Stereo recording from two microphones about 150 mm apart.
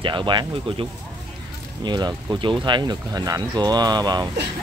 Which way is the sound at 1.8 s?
30° right (ahead or behind).